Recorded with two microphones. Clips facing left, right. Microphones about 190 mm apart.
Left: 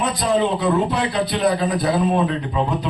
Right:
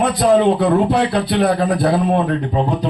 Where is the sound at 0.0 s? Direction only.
60° right (ahead or behind).